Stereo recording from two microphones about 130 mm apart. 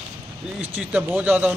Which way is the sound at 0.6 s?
15° right (ahead or behind).